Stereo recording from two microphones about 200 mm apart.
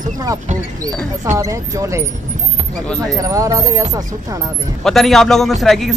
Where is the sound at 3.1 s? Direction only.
15° right (ahead or behind).